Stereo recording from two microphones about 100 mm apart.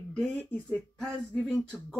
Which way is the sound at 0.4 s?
10° left (ahead or behind).